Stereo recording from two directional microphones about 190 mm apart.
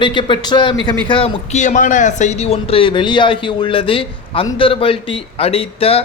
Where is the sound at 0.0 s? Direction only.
25° left (ahead or behind).